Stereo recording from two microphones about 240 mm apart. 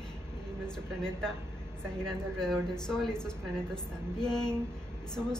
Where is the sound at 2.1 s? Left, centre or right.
Centre.